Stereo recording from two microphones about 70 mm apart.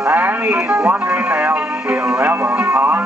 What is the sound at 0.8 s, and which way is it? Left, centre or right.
Music, centre.